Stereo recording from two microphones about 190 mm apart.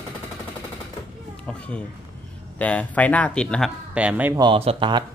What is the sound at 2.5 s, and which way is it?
Speech, 5° left (ahead or behind).